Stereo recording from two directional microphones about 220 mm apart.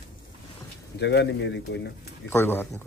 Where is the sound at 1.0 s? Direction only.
50° left (ahead or behind).